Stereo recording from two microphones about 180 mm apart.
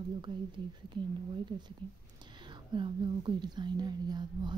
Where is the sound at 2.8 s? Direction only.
25° right (ahead or behind).